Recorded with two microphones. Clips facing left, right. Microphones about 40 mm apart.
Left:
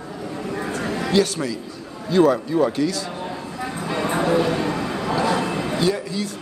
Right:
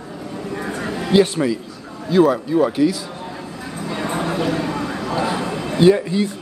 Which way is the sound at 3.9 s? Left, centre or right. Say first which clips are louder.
Left 3 dB; centre.